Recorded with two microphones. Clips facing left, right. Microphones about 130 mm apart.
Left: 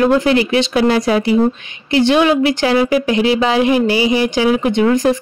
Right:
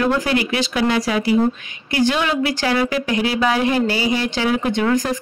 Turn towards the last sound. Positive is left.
turn(degrees=20)  # may be behind; listen again after turning